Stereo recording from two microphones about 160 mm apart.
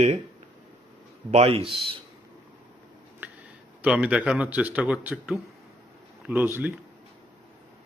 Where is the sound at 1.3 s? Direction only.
40° right (ahead or behind).